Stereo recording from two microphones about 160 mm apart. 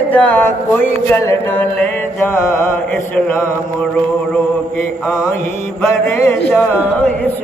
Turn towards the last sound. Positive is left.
turn(degrees=10)  # may be behind; listen again after turning